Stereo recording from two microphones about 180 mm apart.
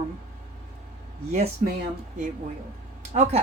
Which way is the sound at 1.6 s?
50° right (ahead or behind).